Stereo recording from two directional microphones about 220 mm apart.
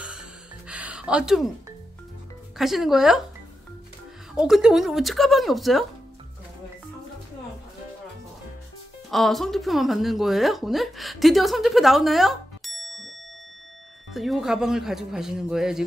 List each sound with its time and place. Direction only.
0.0 s music: 5° right (ahead or behind)
2.5 s speech: centre (ahead or behind)
4.4 s speech: 5° right (ahead or behind)
9.1 s speech: centre (ahead or behind)
14.1 s speech: centre (ahead or behind)